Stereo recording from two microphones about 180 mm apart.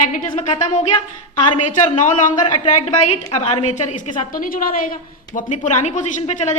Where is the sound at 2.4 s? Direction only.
35° left (ahead or behind).